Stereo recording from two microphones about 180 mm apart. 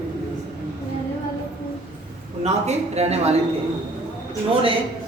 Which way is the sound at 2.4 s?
40° right (ahead or behind).